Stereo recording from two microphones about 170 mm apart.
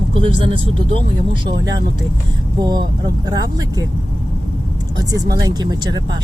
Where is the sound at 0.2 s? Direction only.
30° right (ahead or behind).